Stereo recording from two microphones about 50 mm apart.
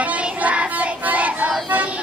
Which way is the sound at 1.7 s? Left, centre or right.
Right.